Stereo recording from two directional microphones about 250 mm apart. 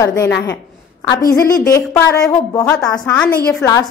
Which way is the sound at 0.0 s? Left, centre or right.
Centre.